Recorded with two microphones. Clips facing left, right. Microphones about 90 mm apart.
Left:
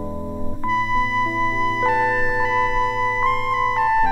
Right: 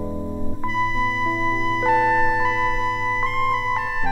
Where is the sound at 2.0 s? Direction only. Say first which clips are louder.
Right 2 dB; 20° left (ahead or behind).